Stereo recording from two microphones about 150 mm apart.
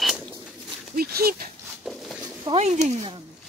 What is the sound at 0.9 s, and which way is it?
Dog, 90° right.